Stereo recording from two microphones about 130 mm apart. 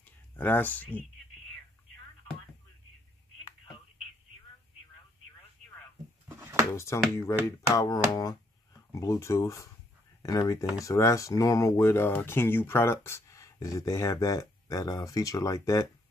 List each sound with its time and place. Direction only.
0.0 s speech: 15° left (ahead or behind)
6.7 s speech: 20° left (ahead or behind)